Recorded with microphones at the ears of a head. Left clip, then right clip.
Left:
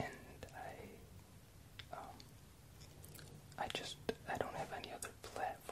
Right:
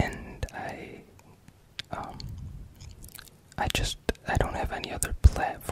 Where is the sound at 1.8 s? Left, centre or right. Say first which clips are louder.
Right 14 dB; right.